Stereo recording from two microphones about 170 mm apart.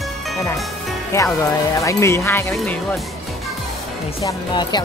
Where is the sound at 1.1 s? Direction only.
15° left (ahead or behind).